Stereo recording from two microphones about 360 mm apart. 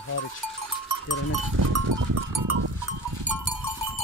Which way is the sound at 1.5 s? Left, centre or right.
Right.